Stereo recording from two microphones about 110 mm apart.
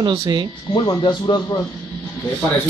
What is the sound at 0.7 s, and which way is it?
Speech, 50° left (ahead or behind).